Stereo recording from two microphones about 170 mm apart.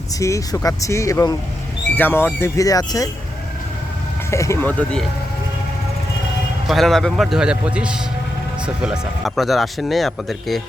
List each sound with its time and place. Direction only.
0.2 s speech: 20° left (ahead or behind)
4.3 s speech: 15° left (ahead or behind)
6.7 s speech: centre (ahead or behind)